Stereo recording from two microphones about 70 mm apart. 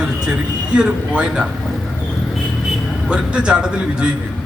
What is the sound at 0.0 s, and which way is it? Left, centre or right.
Speech, centre.